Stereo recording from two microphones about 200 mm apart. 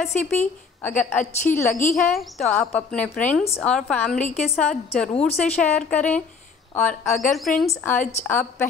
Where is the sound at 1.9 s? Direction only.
Centre (ahead or behind).